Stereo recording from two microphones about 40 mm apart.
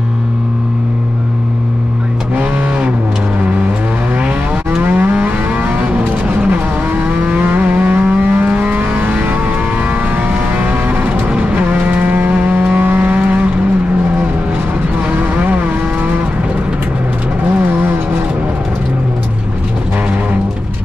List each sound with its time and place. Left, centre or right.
4.8 s vehicle: right
9.0 s vehicle: right
10.1 s vehicle: right
11.1 s vehicle: right
12.7 s vehicle: right
15.3 s vehicle: right